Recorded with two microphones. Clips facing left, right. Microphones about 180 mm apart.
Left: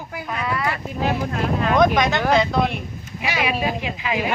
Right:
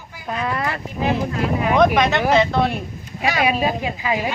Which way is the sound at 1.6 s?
10° right (ahead or behind).